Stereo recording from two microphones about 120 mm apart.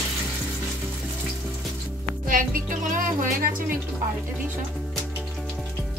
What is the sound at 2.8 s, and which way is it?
Speech, 90° right.